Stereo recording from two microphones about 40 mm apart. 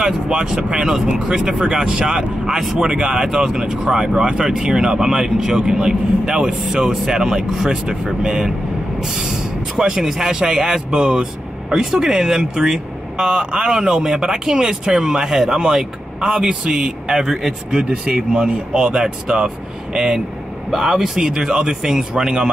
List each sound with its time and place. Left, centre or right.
0.0 s speech: centre